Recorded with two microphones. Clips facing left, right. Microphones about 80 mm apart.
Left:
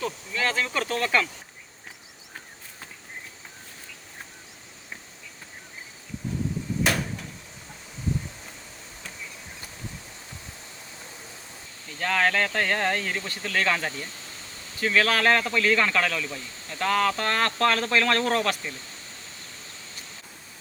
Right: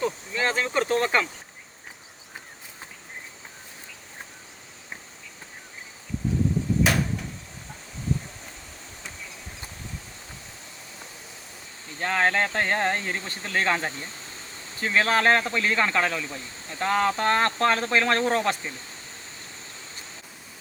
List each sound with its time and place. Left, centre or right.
0.0 s speech: right
6.8 s a sound: centre
11.9 s speech: right